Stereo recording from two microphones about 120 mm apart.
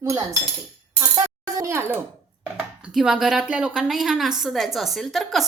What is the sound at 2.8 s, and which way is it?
A woman's voice, 5° right (ahead or behind).